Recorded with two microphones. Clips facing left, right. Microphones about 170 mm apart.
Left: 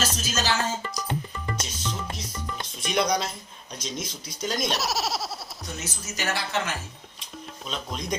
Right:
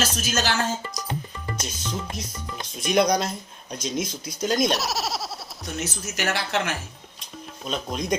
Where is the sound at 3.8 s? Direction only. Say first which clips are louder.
Right 6 dB; centre (ahead or behind).